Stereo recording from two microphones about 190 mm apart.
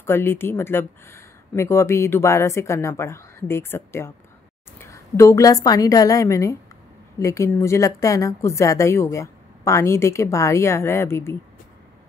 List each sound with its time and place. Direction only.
0.0 s a woman's voice: 10° left (ahead or behind)